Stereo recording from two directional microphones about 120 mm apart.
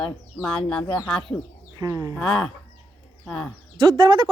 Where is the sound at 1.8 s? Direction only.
30° right (ahead or behind).